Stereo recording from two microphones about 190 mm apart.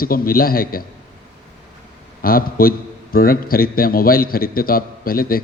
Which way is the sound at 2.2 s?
50° left (ahead or behind).